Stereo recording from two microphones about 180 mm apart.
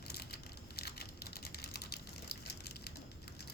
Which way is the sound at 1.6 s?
60° left (ahead or behind).